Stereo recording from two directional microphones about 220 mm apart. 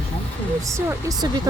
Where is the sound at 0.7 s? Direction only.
15° right (ahead or behind).